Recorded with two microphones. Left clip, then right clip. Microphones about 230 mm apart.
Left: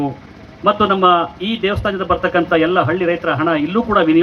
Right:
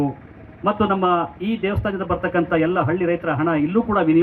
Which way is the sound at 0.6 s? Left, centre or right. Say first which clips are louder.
Left 7 dB; right.